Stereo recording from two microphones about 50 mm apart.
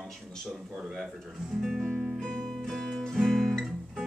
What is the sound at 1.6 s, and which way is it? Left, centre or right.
Speech, centre.